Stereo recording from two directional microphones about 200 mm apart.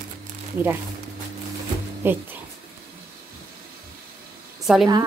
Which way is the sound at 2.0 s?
10° right (ahead or behind).